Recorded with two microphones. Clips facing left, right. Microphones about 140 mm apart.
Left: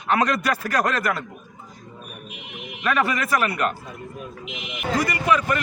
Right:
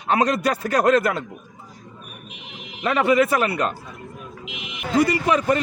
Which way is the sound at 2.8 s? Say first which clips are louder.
Right 5 dB; 25° right (ahead or behind).